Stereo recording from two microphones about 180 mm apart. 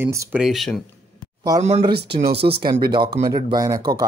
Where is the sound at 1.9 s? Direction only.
65° right (ahead or behind).